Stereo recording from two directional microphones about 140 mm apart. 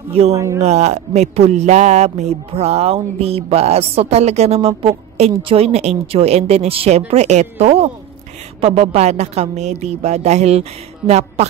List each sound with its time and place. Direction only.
0.3 s speech: 20° right (ahead or behind)
0.6 s speech: 55° right (ahead or behind)